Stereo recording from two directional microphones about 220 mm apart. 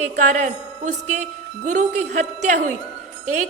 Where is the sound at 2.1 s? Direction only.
35° right (ahead or behind).